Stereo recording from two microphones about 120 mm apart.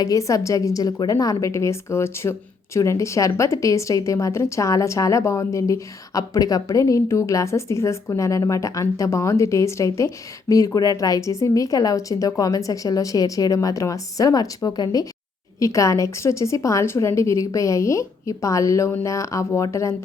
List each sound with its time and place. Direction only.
0.0 s speech: 30° left (ahead or behind)